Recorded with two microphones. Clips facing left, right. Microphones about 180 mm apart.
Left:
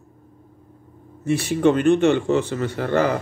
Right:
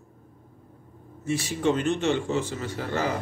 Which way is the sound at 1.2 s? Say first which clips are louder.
Left 7 dB; 60° left (ahead or behind).